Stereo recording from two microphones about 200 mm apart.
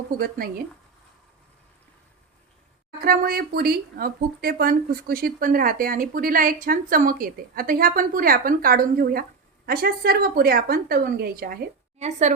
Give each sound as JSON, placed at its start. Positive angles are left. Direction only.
{"t": 0.2, "sound": "a woman's voice", "side_deg": -50}
{"t": 3.0, "sound": "a woman's voice", "side_deg": -50}
{"t": 11.9, "sound": "a woman's voice", "side_deg": -35}